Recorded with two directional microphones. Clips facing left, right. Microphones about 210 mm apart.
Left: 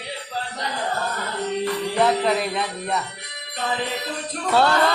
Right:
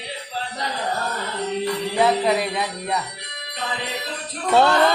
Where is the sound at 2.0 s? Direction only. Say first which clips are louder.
Right 1 dB; 5° right (ahead or behind).